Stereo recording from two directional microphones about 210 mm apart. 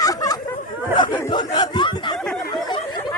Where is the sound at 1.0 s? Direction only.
20° left (ahead or behind).